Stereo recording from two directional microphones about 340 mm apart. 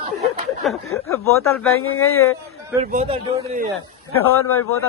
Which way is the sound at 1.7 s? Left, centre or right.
Left.